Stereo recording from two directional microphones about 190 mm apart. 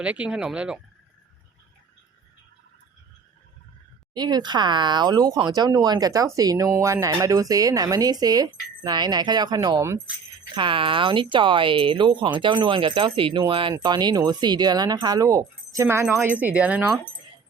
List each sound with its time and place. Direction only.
0.0 s speech: 5° right (ahead or behind)
4.1 s speech: 20° right (ahead or behind)